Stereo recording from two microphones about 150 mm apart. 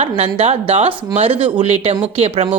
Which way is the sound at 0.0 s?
45° right (ahead or behind).